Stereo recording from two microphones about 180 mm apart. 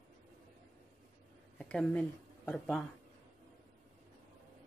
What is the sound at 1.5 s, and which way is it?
Speech, 5° left (ahead or behind).